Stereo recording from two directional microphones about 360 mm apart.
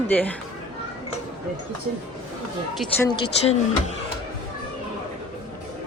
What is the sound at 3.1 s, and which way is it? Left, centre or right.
Speech, centre.